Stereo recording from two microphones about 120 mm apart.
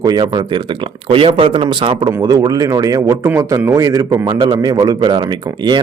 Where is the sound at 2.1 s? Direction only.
30° right (ahead or behind).